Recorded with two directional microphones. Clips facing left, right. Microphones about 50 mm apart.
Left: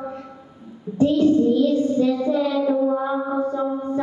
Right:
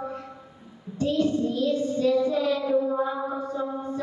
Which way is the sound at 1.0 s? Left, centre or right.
Left.